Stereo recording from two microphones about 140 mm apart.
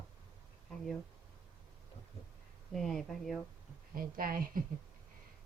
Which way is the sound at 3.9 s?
90° right.